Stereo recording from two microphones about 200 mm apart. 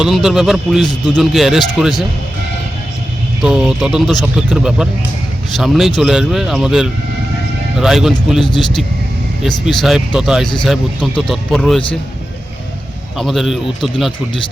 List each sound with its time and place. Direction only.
0.0 s speech: centre (ahead or behind)
3.4 s speech: 5° right (ahead or behind)
8.4 s speech: 25° left (ahead or behind)
9.4 s speech: centre (ahead or behind)
13.1 s speech: centre (ahead or behind)